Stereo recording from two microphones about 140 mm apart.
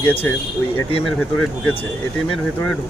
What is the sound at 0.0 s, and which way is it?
Speech, 15° left (ahead or behind).